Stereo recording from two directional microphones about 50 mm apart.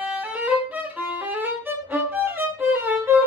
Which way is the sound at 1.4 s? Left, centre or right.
Right.